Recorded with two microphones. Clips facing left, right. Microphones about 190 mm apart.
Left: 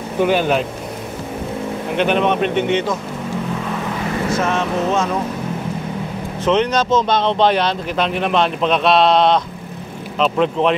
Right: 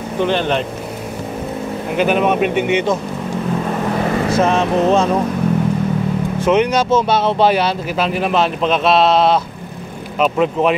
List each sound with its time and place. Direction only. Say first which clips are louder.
0.2 s speech: left 1 dB; 10° left (ahead or behind)
2.0 s speech: right 2 dB; 5° right (ahead or behind)
4.4 s speech: right 6 dB; 30° right (ahead or behind)
6.4 s speech: right 1 dB; 10° right (ahead or behind)